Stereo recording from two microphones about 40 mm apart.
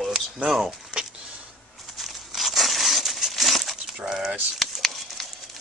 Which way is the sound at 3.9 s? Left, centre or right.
Centre.